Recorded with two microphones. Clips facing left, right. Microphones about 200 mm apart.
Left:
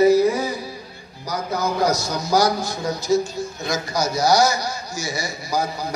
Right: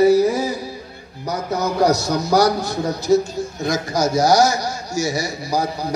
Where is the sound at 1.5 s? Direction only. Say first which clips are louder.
Right 4 dB; 70° right (ahead or behind).